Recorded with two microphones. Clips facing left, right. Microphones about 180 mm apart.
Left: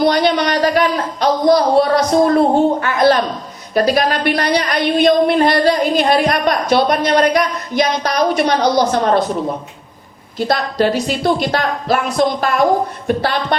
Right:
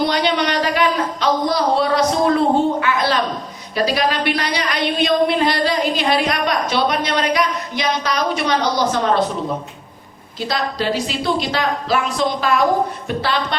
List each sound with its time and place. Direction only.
0.0 s a sound: 45° left (ahead or behind)
3.8 s a woman's voice: 50° left (ahead or behind)
10.3 s a woman's voice: 50° left (ahead or behind)